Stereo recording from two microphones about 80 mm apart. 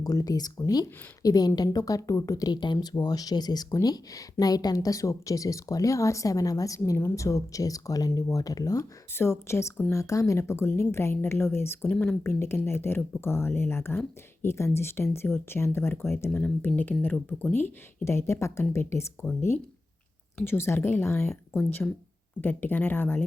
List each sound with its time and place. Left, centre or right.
0.0 s speech: left
2.5 s speech: left
2.8 s speech: left
9.1 s speech: left
20.4 s speech: left
22.4 s speech: left